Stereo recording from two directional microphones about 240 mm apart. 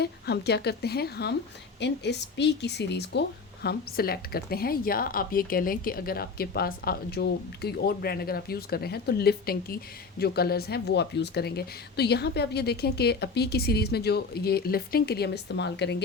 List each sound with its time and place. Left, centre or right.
0.0 s speech: left